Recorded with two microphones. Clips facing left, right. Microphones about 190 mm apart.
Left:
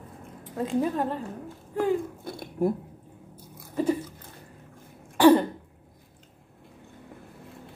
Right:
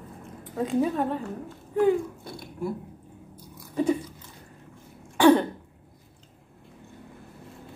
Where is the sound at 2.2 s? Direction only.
50° left (ahead or behind).